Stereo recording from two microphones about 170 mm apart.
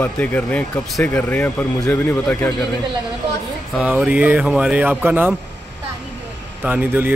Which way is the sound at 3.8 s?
10° right (ahead or behind).